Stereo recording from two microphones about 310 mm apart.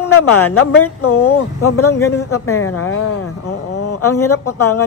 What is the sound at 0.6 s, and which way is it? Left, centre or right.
Speech, left.